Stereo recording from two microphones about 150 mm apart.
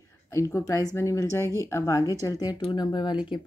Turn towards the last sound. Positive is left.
turn(degrees=30)  # may be behind; listen again after turning